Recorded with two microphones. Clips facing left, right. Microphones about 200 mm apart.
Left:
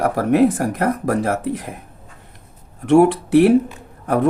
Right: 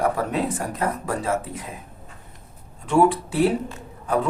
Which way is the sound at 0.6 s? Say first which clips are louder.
Left 7 dB; 90° left.